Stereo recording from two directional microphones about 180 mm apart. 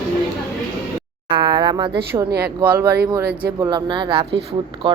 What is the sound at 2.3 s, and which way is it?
Speech, 60° right (ahead or behind).